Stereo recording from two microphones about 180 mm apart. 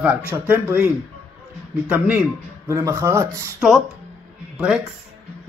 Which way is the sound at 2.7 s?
15° right (ahead or behind).